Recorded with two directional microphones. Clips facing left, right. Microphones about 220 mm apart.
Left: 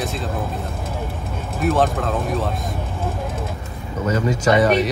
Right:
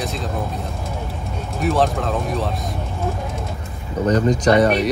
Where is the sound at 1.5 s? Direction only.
Centre (ahead or behind).